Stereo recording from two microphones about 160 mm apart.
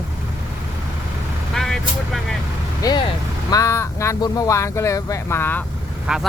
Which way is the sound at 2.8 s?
25° left (ahead or behind).